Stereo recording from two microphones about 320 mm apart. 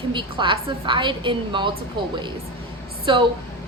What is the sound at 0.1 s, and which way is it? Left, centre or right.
A woman's voice, centre.